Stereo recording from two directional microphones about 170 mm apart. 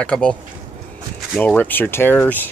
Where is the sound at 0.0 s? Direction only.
5° left (ahead or behind).